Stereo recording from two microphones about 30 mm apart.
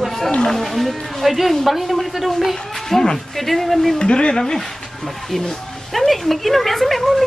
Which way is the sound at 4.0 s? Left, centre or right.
Left.